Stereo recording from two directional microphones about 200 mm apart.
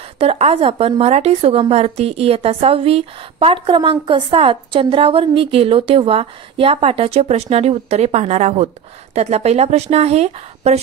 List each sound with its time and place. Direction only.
0.2 s a woman's voice: 30° right (ahead or behind)